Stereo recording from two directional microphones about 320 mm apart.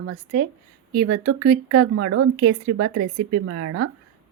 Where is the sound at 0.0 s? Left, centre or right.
Right.